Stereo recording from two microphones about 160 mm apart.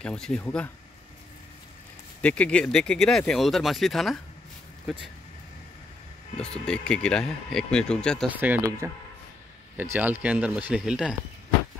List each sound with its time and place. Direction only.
0.0 s speech: 5° left (ahead or behind)
2.2 s speech: 10° left (ahead or behind)
6.4 s speech: 5° left (ahead or behind)
8.3 s speech: 10° right (ahead or behind)